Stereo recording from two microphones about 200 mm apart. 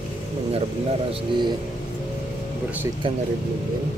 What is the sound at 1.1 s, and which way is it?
Speech, 20° right (ahead or behind).